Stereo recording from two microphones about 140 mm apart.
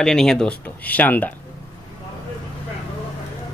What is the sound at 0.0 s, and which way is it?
Speech, 5° left (ahead or behind).